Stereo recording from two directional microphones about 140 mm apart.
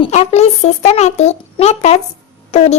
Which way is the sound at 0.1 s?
55° left (ahead or behind).